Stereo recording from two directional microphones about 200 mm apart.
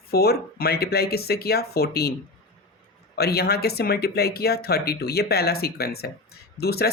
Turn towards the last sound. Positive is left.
turn(degrees=50)  # may be behind; listen again after turning